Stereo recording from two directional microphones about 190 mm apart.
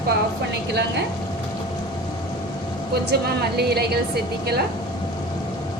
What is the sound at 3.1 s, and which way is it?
A woman's voice, 55° right (ahead or behind).